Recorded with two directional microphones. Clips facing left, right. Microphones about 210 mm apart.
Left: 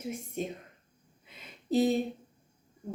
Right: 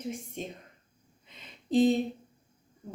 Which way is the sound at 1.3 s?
5° left (ahead or behind).